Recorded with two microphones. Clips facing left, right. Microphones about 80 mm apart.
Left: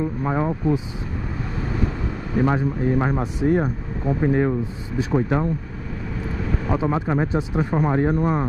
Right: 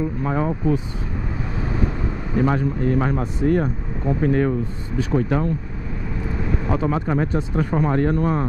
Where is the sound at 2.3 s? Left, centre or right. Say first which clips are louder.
Even; centre.